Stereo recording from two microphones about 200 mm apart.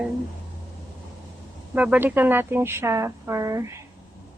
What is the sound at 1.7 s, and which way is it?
A woman's voice, 5° right (ahead or behind).